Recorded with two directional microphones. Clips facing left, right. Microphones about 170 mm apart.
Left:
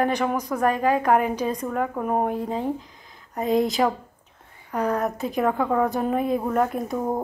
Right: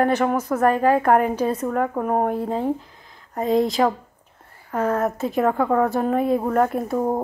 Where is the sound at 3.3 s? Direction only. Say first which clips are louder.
Right 2 dB; centre (ahead or behind).